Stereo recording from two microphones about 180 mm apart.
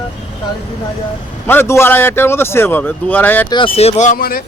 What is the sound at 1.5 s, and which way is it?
A man's voice, 15° left (ahead or behind).